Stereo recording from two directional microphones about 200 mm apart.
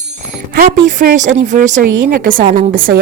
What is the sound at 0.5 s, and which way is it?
A woman's voice, 40° right (ahead or behind).